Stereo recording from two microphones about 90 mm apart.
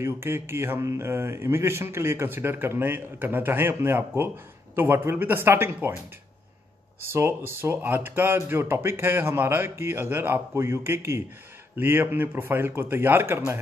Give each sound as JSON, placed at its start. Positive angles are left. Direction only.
{"t": 0.0, "sound": "speech", "side_deg": -30}
{"t": 7.1, "sound": "speech", "side_deg": -25}